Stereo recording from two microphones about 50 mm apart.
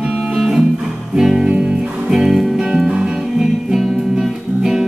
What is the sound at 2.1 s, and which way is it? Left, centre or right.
Music, centre.